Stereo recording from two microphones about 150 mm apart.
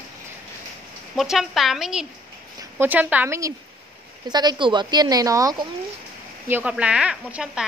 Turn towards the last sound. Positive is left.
turn(degrees=-5)  # may be behind; listen again after turning